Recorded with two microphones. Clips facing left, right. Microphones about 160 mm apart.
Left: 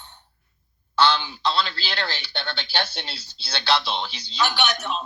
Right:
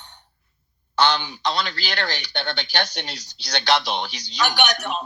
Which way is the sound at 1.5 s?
40° right (ahead or behind).